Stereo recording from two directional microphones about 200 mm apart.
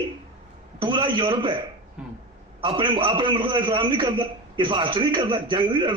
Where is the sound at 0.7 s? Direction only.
25° right (ahead or behind).